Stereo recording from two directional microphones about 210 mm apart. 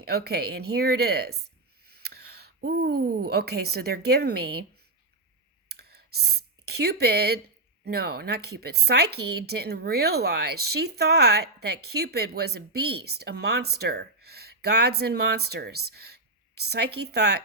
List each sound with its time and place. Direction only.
0.0 s a woman's voice: 50° right (ahead or behind)
5.6 s a sound: 50° right (ahead or behind)
7.9 s speech: 50° right (ahead or behind)